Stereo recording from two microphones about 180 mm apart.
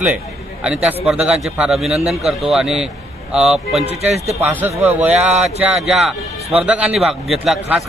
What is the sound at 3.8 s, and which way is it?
Speech, 35° right (ahead or behind).